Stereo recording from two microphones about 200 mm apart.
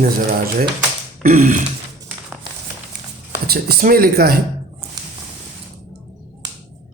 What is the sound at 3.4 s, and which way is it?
Speech, 50° right (ahead or behind).